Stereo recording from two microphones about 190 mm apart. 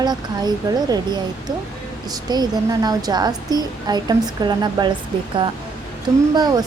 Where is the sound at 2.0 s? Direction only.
20° right (ahead or behind).